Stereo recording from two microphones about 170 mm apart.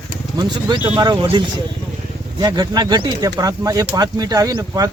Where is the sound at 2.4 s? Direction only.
25° right (ahead or behind).